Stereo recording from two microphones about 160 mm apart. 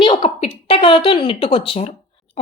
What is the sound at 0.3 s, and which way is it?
Speech, 35° left (ahead or behind).